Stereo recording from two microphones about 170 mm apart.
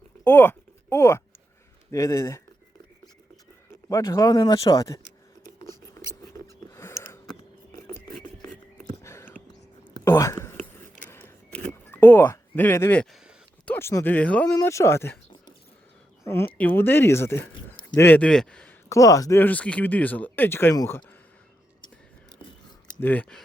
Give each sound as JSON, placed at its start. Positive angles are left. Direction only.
{"t": 0.3, "sound": "a sound", "side_deg": 10}
{"t": 1.9, "sound": "speech", "side_deg": 20}
{"t": 3.8, "sound": "speech", "side_deg": 20}
{"t": 6.2, "sound": "a sound", "side_deg": 15}
{"t": 8.9, "sound": "whispering", "side_deg": 15}
{"t": 9.9, "sound": "a sound", "side_deg": 15}
{"t": 12.2, "sound": "speech", "side_deg": 15}
{"t": 16.2, "sound": "speech", "side_deg": 15}
{"t": 18.9, "sound": "speech", "side_deg": 20}
{"t": 23.0, "sound": "speech", "side_deg": 10}